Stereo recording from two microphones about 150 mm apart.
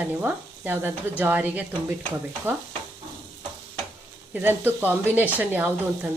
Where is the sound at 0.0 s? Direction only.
10° right (ahead or behind).